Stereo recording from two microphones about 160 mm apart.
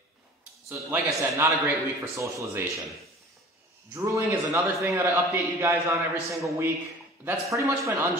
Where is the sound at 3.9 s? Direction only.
20° right (ahead or behind).